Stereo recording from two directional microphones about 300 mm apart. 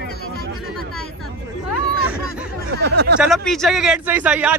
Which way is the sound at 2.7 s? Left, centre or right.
Right.